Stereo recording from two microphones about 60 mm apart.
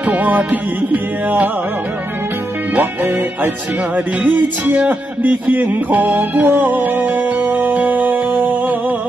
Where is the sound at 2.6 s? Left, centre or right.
Right.